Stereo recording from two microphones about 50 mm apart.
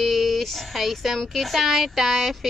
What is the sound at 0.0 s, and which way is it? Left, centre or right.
Speech, centre.